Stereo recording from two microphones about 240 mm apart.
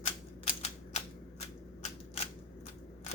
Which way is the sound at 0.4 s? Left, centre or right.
Left.